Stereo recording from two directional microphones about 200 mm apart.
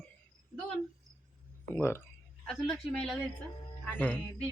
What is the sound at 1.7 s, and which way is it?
Speech, 10° left (ahead or behind).